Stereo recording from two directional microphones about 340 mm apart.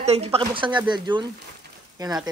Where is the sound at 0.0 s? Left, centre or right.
Centre.